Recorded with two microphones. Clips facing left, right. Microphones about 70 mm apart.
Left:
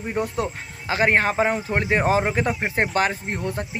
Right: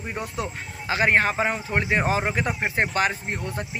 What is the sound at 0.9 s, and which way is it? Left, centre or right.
A man's voice, left.